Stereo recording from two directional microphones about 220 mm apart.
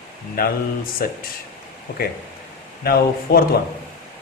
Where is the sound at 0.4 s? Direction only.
40° left (ahead or behind).